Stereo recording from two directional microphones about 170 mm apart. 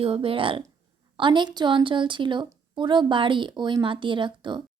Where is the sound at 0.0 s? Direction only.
30° right (ahead or behind).